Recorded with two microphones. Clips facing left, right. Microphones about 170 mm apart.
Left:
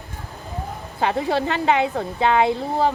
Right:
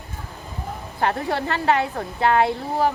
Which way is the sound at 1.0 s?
20° left (ahead or behind).